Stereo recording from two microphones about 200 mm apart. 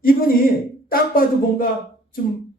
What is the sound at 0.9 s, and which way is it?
Speech, 45° left (ahead or behind).